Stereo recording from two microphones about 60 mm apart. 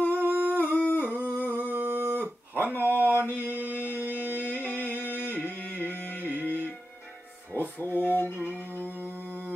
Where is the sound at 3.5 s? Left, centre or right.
Right.